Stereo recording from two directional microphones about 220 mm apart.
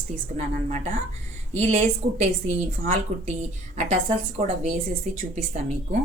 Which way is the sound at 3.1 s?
35° right (ahead or behind).